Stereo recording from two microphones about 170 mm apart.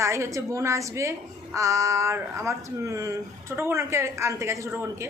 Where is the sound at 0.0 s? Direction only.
15° right (ahead or behind).